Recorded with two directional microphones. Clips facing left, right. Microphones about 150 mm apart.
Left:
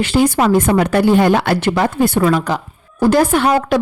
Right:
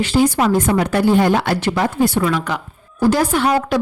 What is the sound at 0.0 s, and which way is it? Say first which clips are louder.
Speech: left 2 dB; 60° left (ahead or behind).